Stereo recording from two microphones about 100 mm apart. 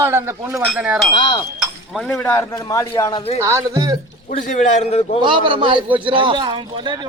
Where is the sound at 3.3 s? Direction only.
30° right (ahead or behind).